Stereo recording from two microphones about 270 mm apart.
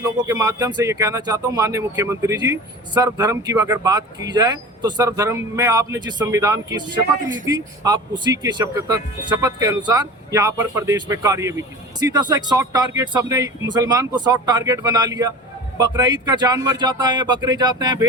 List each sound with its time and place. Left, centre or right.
0.0 s speech: centre